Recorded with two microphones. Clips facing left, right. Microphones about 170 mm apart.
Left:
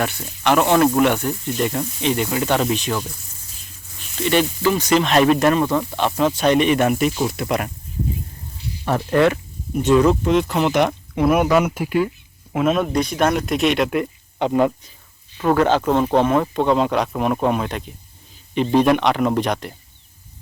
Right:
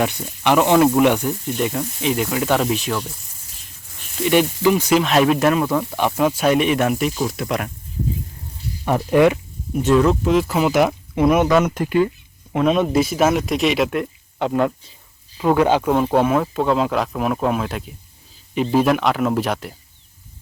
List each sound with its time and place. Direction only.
0.4 s speech: 15° right (ahead or behind)
4.2 s speech: 10° right (ahead or behind)
8.9 s speech: 10° right (ahead or behind)
9.8 s speech: centre (ahead or behind)
11.3 s speech: 10° left (ahead or behind)
15.4 s speech: 10° right (ahead or behind)